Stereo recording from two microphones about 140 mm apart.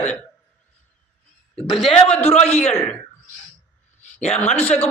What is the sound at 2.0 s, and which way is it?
Speech, 45° left (ahead or behind).